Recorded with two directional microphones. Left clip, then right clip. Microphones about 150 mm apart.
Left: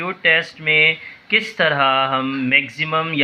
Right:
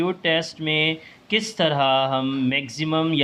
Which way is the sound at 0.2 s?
50° right (ahead or behind).